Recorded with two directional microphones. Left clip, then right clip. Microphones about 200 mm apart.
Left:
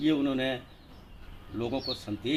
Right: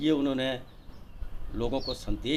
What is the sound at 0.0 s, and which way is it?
A man's voice, 20° right (ahead or behind).